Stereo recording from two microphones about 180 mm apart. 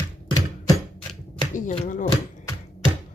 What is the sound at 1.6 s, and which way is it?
Speech, 40° left (ahead or behind).